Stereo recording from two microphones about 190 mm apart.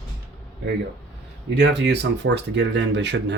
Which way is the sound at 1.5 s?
65° right (ahead or behind).